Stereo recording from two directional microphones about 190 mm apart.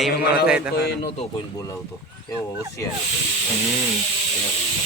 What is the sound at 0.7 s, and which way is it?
Speech, 55° left (ahead or behind).